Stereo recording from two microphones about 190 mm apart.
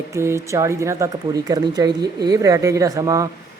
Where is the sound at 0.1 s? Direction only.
15° right (ahead or behind).